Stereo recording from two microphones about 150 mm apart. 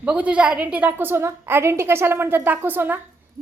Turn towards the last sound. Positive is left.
turn(degrees=-15)  # may be behind; listen again after turning